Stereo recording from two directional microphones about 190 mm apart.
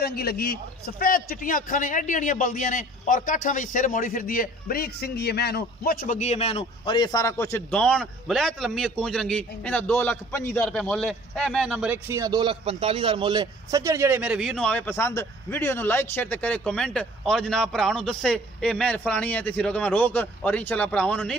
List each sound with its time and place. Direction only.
0.0 s a man's voice: 55° left (ahead or behind); by 21.4 s 5° left (ahead or behind)